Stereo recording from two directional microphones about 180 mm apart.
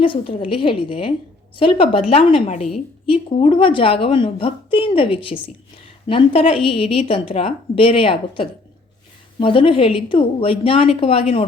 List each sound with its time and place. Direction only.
0.0 s a woman's voice: 30° left (ahead or behind)